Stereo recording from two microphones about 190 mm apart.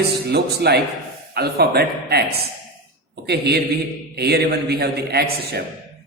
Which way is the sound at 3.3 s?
60° right (ahead or behind).